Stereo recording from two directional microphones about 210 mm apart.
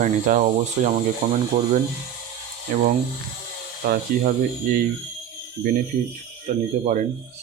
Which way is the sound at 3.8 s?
40° right (ahead or behind).